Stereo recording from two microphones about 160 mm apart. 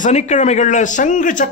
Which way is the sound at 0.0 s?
45° left (ahead or behind).